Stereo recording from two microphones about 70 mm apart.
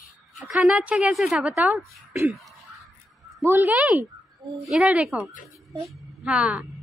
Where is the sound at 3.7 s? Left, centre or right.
Right.